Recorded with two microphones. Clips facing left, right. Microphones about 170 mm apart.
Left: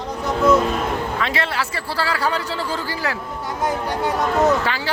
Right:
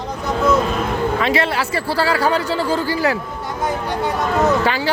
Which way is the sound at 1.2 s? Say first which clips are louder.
Right 5 dB; 10° right (ahead or behind).